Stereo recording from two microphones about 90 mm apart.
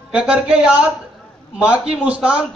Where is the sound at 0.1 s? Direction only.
10° right (ahead or behind).